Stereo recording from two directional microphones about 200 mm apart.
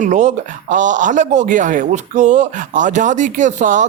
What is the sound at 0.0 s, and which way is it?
Speech, 35° right (ahead or behind).